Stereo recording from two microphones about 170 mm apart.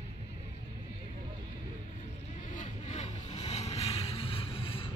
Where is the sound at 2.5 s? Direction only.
45° left (ahead or behind).